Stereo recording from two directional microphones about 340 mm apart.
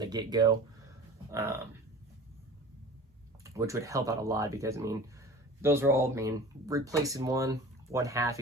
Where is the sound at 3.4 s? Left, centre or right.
Centre.